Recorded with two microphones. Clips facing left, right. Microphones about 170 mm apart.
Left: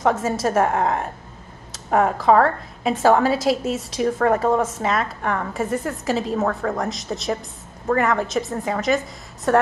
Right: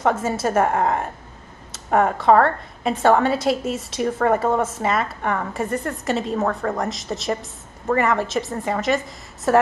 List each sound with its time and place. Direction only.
0.0 s a woman's voice: centre (ahead or behind)